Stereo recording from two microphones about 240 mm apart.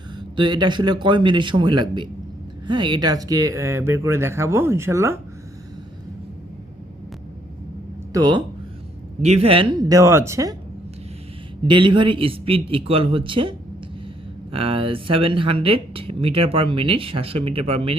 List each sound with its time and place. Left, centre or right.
0.2 s speech: centre
8.1 s speech: centre
11.6 s speech: centre